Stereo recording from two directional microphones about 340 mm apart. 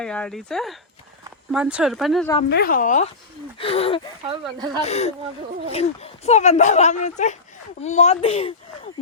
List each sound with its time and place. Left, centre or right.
0.0 s speech: centre
2.5 s speech: left
4.3 s speech: centre
4.8 s speech: centre